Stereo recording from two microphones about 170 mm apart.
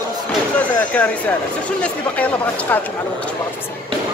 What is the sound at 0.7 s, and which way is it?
Speech, 10° left (ahead or behind).